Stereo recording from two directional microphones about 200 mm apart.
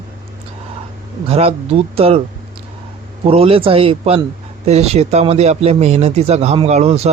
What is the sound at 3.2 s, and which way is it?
Speech, 30° right (ahead or behind).